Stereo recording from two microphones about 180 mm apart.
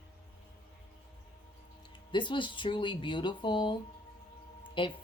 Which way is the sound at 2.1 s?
25° left (ahead or behind).